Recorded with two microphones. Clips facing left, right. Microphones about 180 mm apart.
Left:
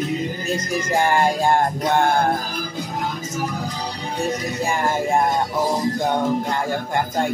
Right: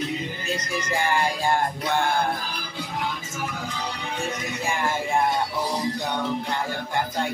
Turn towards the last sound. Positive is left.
turn(degrees=45)  # may be behind; listen again after turning